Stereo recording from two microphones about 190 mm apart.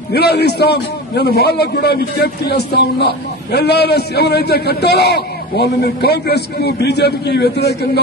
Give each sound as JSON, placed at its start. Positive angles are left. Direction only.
{"t": 0.1, "sound": "a man's voice", "side_deg": 60}